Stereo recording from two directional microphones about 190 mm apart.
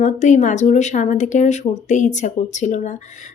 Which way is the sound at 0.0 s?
40° left (ahead or behind).